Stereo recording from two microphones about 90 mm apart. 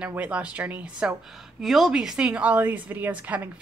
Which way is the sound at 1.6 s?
Centre (ahead or behind).